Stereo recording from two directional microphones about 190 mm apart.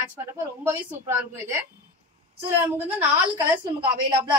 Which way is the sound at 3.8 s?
25° right (ahead or behind).